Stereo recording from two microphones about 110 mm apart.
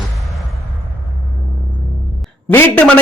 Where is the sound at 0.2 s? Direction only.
Centre (ahead or behind).